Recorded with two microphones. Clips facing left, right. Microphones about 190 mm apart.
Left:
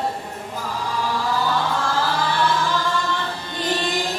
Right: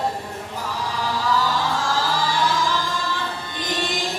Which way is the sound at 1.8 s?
60° left (ahead or behind).